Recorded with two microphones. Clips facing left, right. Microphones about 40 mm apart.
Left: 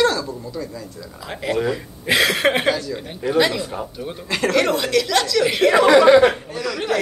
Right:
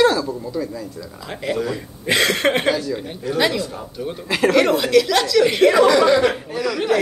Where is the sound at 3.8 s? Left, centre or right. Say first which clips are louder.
Right 2 dB; centre.